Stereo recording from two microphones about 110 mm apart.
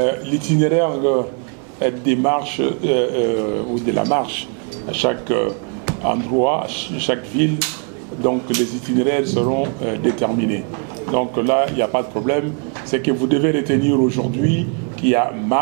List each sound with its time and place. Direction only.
0.0 s speech: 15° right (ahead or behind)
15.0 s speech: 20° right (ahead or behind)